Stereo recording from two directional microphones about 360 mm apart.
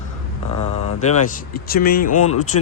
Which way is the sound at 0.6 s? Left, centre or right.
Centre.